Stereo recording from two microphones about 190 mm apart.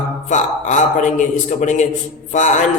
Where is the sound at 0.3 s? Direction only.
40° left (ahead or behind).